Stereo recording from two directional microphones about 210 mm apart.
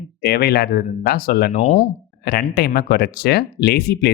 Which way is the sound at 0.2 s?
50° left (ahead or behind).